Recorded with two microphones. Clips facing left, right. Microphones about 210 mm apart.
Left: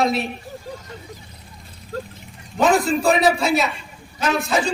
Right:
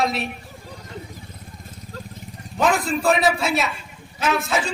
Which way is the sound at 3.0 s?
Centre (ahead or behind).